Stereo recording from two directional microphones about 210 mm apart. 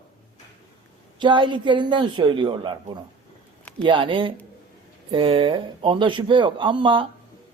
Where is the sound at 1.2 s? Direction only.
20° right (ahead or behind).